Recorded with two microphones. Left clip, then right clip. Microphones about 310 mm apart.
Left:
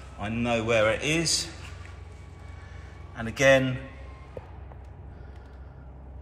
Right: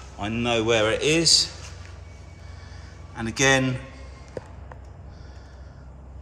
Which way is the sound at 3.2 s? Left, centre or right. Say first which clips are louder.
Even; centre.